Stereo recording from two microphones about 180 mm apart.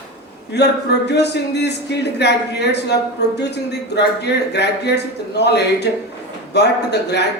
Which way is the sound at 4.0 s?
70° left (ahead or behind).